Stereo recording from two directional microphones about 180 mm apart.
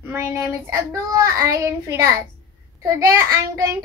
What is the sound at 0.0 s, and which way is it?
A child's voice, 15° right (ahead or behind).